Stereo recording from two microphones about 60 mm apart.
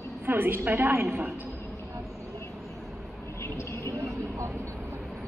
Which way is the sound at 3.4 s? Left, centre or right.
Left.